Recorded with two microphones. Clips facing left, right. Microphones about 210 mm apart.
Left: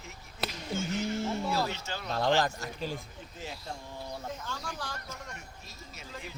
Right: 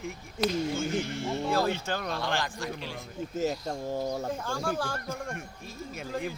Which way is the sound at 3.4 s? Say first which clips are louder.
Right 12 dB; 45° right (ahead or behind).